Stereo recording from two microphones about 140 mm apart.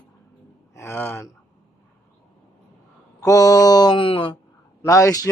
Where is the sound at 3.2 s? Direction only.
25° left (ahead or behind).